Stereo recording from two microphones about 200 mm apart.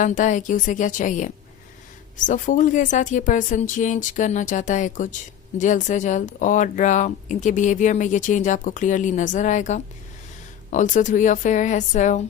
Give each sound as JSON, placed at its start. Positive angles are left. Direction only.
{"t": 0.0, "sound": "speech", "side_deg": 40}